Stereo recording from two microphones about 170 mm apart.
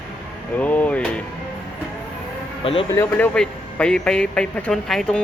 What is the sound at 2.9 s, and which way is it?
Speech, 15° left (ahead or behind).